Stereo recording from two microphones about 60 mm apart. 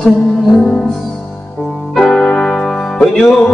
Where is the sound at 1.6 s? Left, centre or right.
Centre.